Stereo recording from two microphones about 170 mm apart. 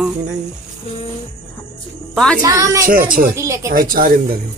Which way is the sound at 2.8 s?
55° right (ahead or behind).